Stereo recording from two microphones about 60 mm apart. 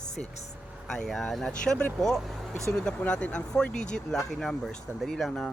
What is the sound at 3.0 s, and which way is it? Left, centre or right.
Speech, left.